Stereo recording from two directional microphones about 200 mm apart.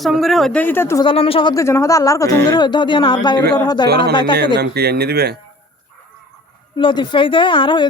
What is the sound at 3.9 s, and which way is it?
Speech, 55° right (ahead or behind).